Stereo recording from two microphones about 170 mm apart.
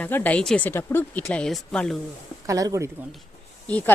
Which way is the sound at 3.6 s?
10° left (ahead or behind).